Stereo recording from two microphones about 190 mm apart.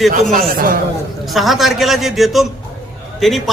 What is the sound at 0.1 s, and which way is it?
Speech, 45° right (ahead or behind).